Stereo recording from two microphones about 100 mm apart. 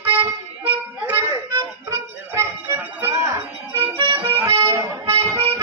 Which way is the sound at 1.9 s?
25° right (ahead or behind).